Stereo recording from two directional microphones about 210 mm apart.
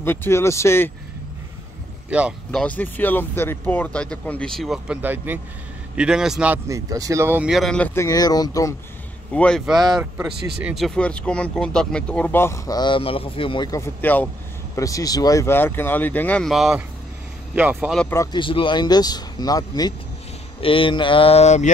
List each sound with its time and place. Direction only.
0.0 s speech: 10° left (ahead or behind)
2.0 s speech: 5° right (ahead or behind)
2.6 s speech: 10° left (ahead or behind)
9.3 s speech: 5° left (ahead or behind)
17.9 s speech: 15° left (ahead or behind); by 21.6 s 30° left (ahead or behind)